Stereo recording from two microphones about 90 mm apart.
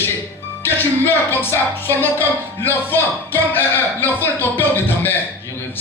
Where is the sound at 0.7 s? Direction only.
25° left (ahead or behind).